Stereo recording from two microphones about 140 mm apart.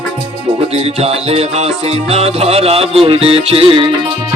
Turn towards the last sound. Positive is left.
turn(degrees=-40)  # may be behind; listen again after turning